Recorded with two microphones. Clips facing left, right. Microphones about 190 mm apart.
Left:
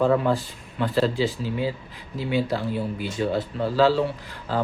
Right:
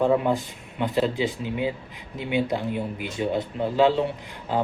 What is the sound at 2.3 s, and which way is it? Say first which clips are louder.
Speech: even; 20° right (ahead or behind).